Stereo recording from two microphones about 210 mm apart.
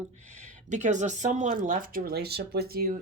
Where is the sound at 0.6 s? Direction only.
35° right (ahead or behind).